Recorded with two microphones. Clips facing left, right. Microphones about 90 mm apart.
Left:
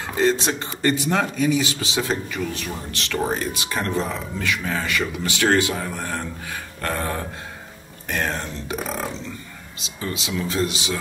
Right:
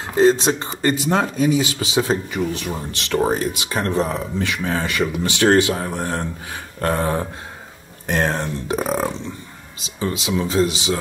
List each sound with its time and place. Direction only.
0.2 s speech: 30° right (ahead or behind)